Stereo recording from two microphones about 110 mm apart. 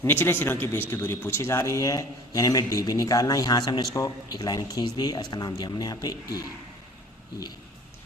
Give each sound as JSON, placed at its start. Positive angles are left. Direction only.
{"t": 0.0, "sound": "a man's voice", "side_deg": 20}